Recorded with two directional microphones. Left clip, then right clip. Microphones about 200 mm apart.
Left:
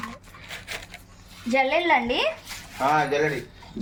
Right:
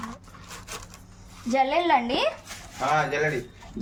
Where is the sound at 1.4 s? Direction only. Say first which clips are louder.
Left 1 dB; centre (ahead or behind).